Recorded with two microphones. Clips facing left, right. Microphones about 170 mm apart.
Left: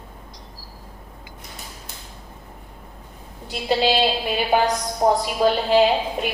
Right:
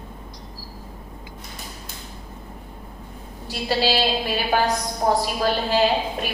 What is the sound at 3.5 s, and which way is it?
A woman's voice, 20° left (ahead or behind).